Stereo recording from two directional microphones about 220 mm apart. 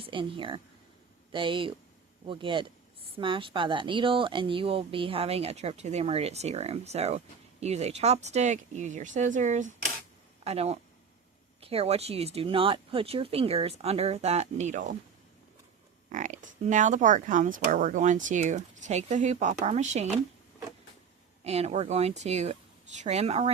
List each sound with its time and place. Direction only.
0.0 s speech: 25° right (ahead or behind)
16.0 s speech: 35° right (ahead or behind)
21.4 s speech: 30° right (ahead or behind)